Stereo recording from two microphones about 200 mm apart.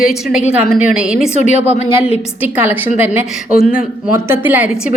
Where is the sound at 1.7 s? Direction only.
30° left (ahead or behind).